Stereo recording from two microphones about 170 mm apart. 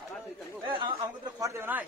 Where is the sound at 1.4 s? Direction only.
15° right (ahead or behind).